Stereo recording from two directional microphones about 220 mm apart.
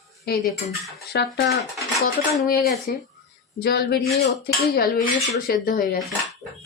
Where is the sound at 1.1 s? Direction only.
50° left (ahead or behind).